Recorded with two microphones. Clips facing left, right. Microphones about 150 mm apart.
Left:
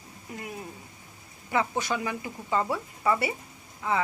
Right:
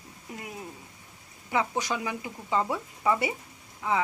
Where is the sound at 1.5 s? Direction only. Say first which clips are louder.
Left 1 dB; 15° right (ahead or behind).